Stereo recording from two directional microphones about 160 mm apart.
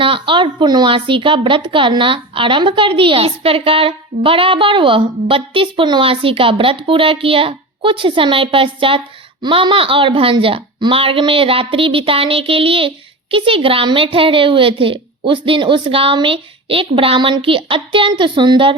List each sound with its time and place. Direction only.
0.0 s speech: 30° right (ahead or behind)